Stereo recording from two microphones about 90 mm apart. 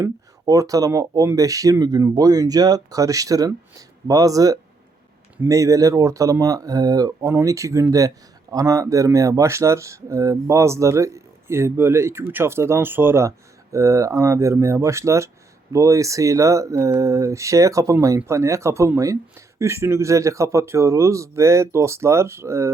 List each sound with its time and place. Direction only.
0.4 s speech: 40° right (ahead or behind)